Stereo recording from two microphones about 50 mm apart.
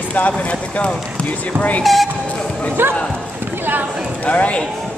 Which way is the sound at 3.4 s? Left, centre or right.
Right.